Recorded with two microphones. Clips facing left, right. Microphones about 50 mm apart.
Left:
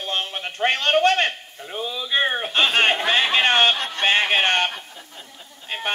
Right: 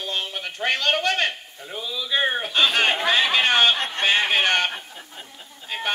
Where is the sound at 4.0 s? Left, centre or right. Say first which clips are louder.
Left 3 dB; left.